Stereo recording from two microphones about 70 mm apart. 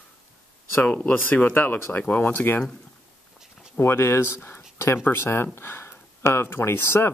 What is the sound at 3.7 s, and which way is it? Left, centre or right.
Speech, left.